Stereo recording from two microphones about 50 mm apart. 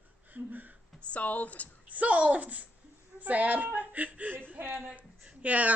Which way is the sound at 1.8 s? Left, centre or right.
Right.